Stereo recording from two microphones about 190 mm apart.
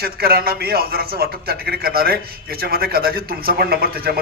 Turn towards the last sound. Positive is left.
turn(degrees=-55)  # may be behind; listen again after turning